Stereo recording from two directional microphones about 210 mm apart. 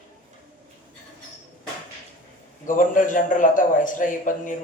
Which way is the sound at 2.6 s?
40° left (ahead or behind).